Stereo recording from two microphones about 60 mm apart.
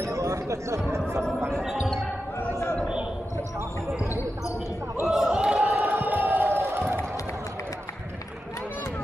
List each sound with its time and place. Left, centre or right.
0.0 s chatter: right
1.6 s basketball bounce: centre
5.0 s a sound: centre
5.7 s crowd: right